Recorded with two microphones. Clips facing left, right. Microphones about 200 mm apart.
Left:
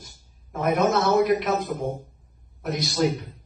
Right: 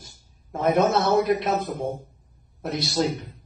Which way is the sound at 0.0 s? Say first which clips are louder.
Left 1 dB; 25° right (ahead or behind).